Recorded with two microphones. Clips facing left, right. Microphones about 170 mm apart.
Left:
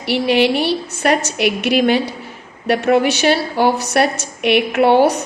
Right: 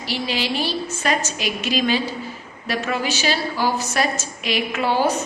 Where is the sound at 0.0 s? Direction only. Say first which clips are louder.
Left 10 dB; 65° left (ahead or behind).